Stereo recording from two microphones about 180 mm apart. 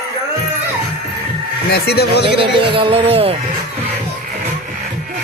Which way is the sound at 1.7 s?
60° left (ahead or behind).